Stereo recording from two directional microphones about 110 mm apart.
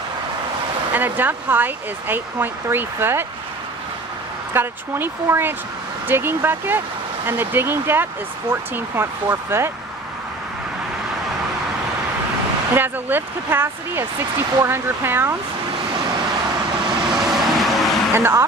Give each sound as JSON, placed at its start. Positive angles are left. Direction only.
{"t": 0.9, "sound": "speech", "side_deg": -15}
{"t": 4.5, "sound": "speech", "side_deg": -20}
{"t": 12.7, "sound": "speech", "side_deg": -20}
{"t": 17.2, "sound": "vehicle", "side_deg": 0}
{"t": 18.1, "sound": "speech", "side_deg": -20}